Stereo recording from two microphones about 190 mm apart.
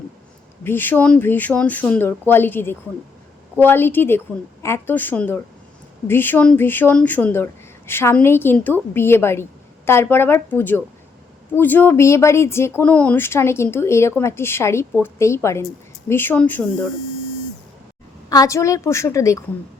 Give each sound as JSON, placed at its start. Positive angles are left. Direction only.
{"t": 0.6, "sound": "speech", "side_deg": 10}
{"t": 18.3, "sound": "speech", "side_deg": 15}